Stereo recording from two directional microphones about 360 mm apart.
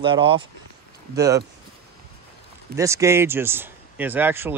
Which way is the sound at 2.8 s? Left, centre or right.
Centre.